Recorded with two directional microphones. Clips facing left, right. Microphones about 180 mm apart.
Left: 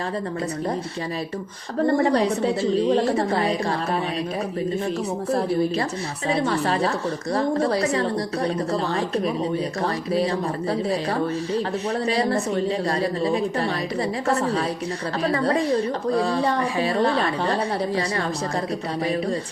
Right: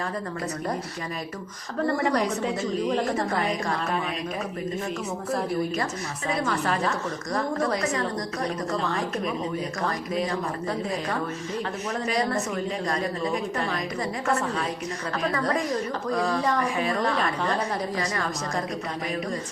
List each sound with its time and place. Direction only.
1.9 s a woman's voice: 30° left (ahead or behind)
5.3 s a woman's voice: 30° left (ahead or behind)